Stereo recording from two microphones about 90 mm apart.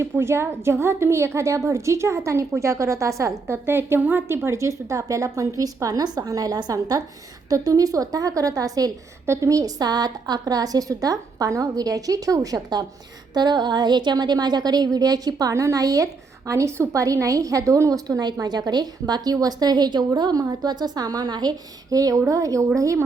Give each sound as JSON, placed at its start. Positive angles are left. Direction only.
{"t": 0.0, "sound": "a woman's voice", "side_deg": -30}
{"t": 9.2, "sound": "a woman's voice", "side_deg": -30}